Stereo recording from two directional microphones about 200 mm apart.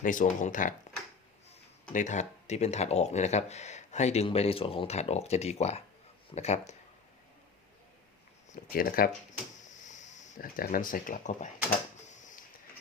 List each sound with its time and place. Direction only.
0.0 s speech: 40° left (ahead or behind)
1.9 s speech: 40° left (ahead or behind)
8.5 s speech: 45° left (ahead or behind)